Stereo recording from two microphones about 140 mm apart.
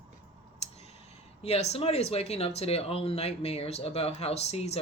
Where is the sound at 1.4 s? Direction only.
50° left (ahead or behind).